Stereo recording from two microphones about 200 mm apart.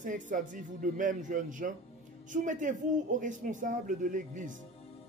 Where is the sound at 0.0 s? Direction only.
40° right (ahead or behind).